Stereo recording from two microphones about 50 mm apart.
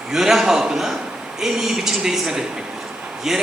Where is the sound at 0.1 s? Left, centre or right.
Centre.